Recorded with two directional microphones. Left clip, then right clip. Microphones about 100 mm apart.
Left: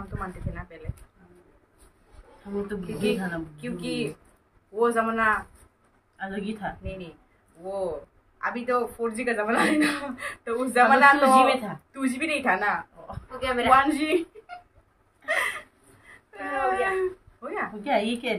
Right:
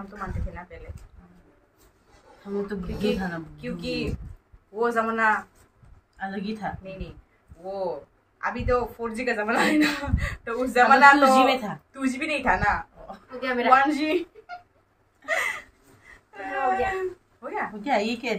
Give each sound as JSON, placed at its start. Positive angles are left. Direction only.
{"t": 0.2, "sound": "speech", "side_deg": 0}
{"t": 2.4, "sound": "a woman's voice", "side_deg": -35}
{"t": 3.0, "sound": "speech", "side_deg": 0}
{"t": 6.1, "sound": "a woman's voice", "side_deg": -35}
{"t": 6.8, "sound": "speech", "side_deg": 0}
{"t": 11.1, "sound": "a woman's voice", "side_deg": -25}
{"t": 11.9, "sound": "speech", "side_deg": 0}
{"t": 13.4, "sound": "a woman's voice", "side_deg": 40}
{"t": 13.7, "sound": "speech", "side_deg": 5}
{"t": 15.2, "sound": "gasp", "side_deg": 0}
{"t": 16.3, "sound": "whimper", "side_deg": 0}
{"t": 17.8, "sound": "a woman's voice", "side_deg": -35}